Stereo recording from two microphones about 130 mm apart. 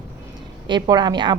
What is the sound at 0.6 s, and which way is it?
Speech, 35° right (ahead or behind).